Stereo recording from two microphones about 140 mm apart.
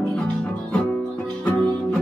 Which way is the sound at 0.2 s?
10° left (ahead or behind).